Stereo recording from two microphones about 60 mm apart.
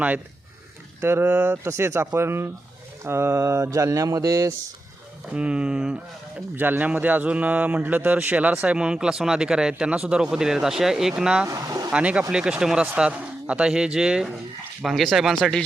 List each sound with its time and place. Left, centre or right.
1.0 s speech: right
1.3 s speech: right
1.6 s speech: right
5.3 s speech: centre
6.6 s speech: right; by 11.4 s centre
11.4 s speech: right
11.9 s speech: centre
13.0 s speech: centre
15.4 s speech: centre